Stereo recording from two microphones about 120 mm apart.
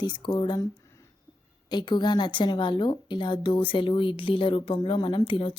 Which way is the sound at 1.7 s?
40° left (ahead or behind).